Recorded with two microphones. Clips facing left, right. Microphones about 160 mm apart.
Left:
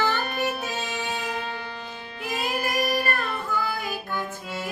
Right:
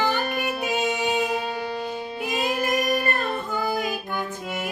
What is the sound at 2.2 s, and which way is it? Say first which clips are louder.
Child singing: right 2 dB; 20° right (ahead or behind).